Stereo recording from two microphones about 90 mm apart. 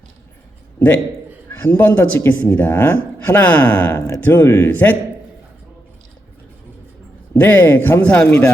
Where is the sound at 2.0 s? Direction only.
20° left (ahead or behind).